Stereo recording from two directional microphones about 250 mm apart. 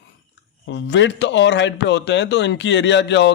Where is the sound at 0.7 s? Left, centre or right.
Left.